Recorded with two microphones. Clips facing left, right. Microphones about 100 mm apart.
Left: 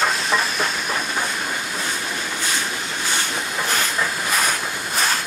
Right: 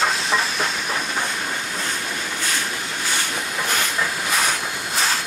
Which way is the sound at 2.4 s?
20° left (ahead or behind).